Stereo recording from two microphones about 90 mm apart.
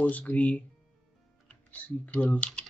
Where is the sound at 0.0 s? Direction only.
15° left (ahead or behind).